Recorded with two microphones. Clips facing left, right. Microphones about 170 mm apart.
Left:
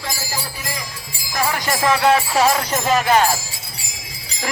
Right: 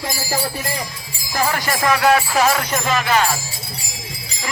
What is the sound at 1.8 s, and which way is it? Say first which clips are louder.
Music: even; 25° left (ahead or behind).